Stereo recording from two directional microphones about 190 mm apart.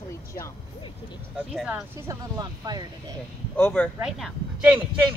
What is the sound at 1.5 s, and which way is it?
Speech, centre (ahead or behind).